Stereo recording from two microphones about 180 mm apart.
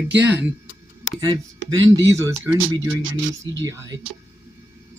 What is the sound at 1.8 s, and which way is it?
Speech, 20° right (ahead or behind).